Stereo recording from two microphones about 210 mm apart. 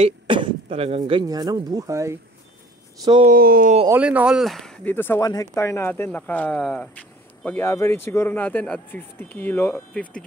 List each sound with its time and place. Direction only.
0.0 s speech: 25° right (ahead or behind)
3.3 s speech: 45° right (ahead or behind)
3.9 s speech: 5° right (ahead or behind)